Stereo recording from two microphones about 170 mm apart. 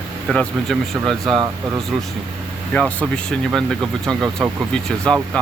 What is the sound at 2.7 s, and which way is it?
Speech, 5° left (ahead or behind).